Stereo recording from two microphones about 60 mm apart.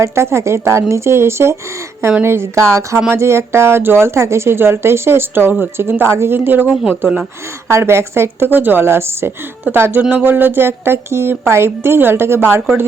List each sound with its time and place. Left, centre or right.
0.0 s a woman's voice: right
7.7 s a woman's voice: right
10.0 s speech: right
10.2 s a woman's voice: right